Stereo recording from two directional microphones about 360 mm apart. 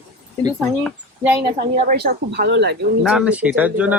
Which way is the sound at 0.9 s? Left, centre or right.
Centre.